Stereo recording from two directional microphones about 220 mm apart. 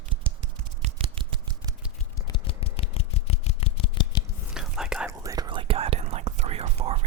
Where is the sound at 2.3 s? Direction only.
25° left (ahead or behind).